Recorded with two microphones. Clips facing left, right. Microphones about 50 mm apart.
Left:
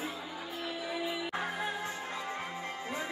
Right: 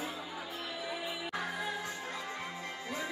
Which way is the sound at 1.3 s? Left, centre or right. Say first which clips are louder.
Left 2 dB; left.